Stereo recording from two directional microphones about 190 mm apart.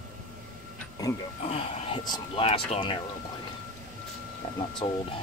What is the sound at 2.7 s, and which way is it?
Speech, 25° left (ahead or behind).